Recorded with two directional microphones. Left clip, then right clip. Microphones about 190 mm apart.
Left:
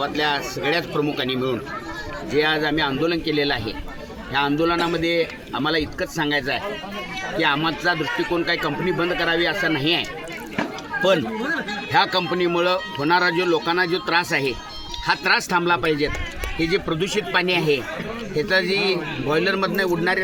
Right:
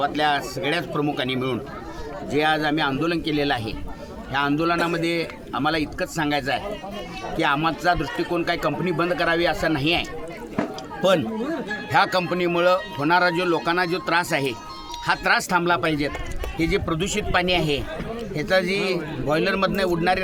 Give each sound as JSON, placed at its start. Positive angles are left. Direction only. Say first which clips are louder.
{"t": 0.0, "sound": "a man's voice", "louder": "right 1 dB", "side_deg": -15}
{"t": 11.9, "sound": "a man's voice", "louder": "even", "side_deg": -25}